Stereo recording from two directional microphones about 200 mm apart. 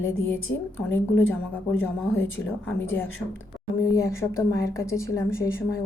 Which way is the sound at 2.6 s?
10° left (ahead or behind).